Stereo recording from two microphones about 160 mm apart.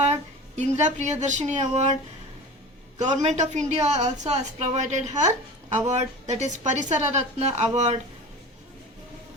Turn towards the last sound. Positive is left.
turn(degrees=-45)  # may be behind; listen again after turning